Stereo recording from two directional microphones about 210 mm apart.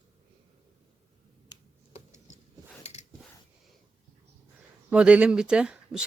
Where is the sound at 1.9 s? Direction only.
35° left (ahead or behind).